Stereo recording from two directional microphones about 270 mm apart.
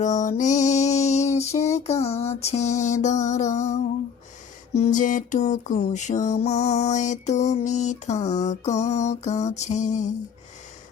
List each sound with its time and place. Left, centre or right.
0.0 s mantra: left